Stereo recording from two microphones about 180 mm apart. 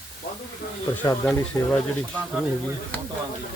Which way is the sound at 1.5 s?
20° left (ahead or behind).